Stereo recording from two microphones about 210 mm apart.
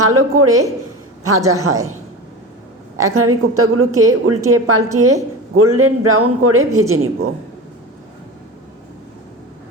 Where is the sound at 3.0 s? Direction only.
90° right.